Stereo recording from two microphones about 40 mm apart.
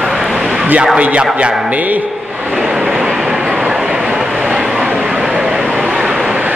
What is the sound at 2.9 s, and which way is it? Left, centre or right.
Train, centre.